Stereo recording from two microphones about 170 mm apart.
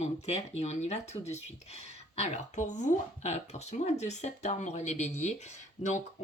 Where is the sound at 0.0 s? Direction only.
40° left (ahead or behind).